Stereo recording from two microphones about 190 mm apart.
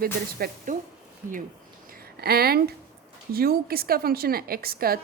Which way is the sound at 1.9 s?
55° right (ahead or behind).